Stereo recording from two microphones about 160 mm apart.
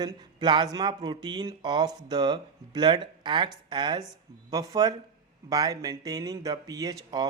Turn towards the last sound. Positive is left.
turn(degrees=-25)  # may be behind; listen again after turning